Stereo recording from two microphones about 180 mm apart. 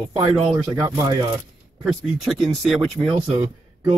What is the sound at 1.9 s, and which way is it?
Speech, centre (ahead or behind).